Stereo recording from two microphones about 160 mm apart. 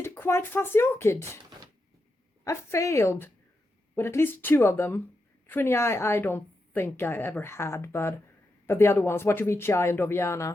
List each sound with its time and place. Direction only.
0.0 s speech: 15° left (ahead or behind)
2.4 s a woman's voice: 20° left (ahead or behind)